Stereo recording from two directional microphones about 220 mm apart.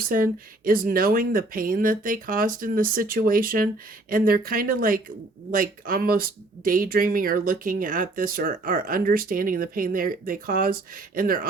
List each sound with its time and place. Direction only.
0.1 s speech: 40° right (ahead or behind)